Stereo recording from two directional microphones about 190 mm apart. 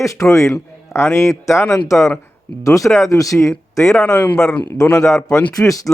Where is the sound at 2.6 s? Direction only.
15° left (ahead or behind).